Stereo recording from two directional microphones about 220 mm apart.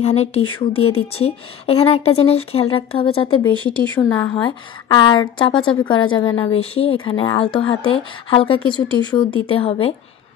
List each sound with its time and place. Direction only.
0.0 s a woman's voice: 30° left (ahead or behind)
3.6 s speech: 5° left (ahead or behind)
4.5 s a woman's voice: 20° left (ahead or behind)